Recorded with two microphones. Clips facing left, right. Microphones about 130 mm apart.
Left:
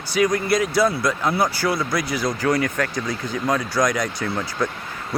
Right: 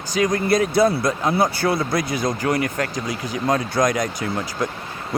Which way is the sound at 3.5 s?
25° right (ahead or behind).